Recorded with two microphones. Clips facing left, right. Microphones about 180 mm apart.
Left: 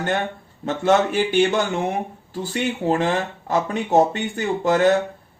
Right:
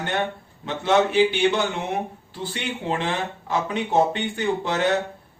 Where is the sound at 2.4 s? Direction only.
45° left (ahead or behind).